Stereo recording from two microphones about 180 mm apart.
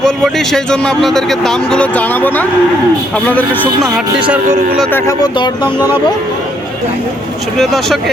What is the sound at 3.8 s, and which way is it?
Speech, 5° right (ahead or behind).